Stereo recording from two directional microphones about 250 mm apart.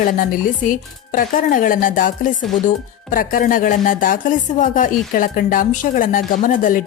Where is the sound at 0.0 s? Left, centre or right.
Left.